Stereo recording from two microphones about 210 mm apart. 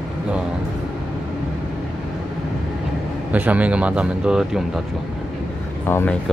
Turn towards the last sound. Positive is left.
turn(degrees=10)  # may be behind; listen again after turning